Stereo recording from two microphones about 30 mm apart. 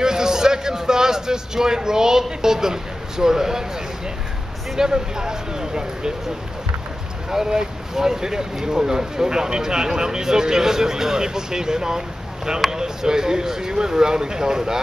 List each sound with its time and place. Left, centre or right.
0.0 s a man's voice: right
4.7 s speech: right
7.4 s speech: right